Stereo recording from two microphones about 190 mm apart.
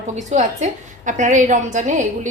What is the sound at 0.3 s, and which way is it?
A woman's voice, 40° right (ahead or behind).